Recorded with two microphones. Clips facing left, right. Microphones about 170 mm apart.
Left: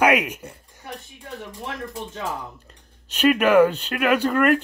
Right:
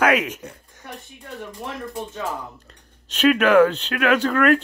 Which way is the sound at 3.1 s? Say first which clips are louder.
Right 1 dB; 10° left (ahead or behind).